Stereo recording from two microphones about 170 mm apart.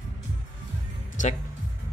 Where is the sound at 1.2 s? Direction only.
50° left (ahead or behind).